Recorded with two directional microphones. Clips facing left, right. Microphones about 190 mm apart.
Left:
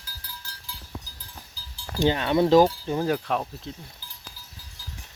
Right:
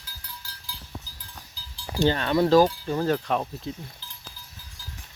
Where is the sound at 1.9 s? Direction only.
15° left (ahead or behind).